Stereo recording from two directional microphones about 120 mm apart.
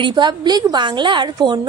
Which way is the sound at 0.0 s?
40° right (ahead or behind).